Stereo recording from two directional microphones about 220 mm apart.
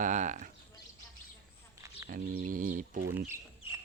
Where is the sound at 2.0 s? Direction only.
40° right (ahead or behind).